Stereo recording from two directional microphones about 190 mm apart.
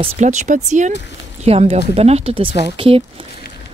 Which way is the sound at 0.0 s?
40° right (ahead or behind).